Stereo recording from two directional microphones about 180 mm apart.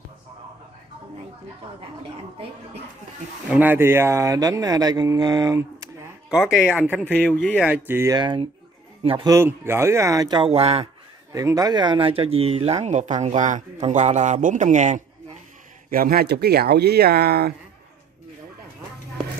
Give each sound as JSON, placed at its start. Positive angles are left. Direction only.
{"t": 3.4, "sound": "speech", "side_deg": -10}
{"t": 6.3, "sound": "speech", "side_deg": -5}
{"t": 7.1, "sound": "speech", "side_deg": 10}
{"t": 7.6, "sound": "speech", "side_deg": -10}
{"t": 9.3, "sound": "speech", "side_deg": -15}
{"t": 11.3, "sound": "speech", "side_deg": -20}
{"t": 15.9, "sound": "speech", "side_deg": -55}